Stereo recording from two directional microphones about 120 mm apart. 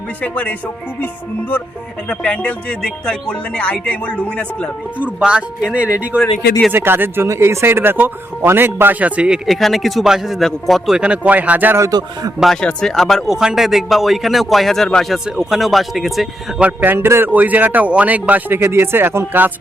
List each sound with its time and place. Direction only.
0.2 s speech: 15° left (ahead or behind)
4.9 s a man's voice: 10° right (ahead or behind)
11.9 s a man's voice: 35° right (ahead or behind)
12.4 s speech: 5° left (ahead or behind)
16.6 s a man's voice: 15° right (ahead or behind)